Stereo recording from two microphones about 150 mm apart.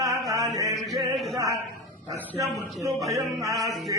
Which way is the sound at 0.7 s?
Centre (ahead or behind).